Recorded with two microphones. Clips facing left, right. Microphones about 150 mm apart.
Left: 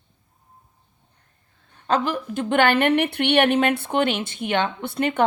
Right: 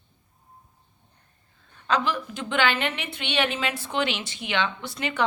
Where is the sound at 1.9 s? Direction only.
50° left (ahead or behind).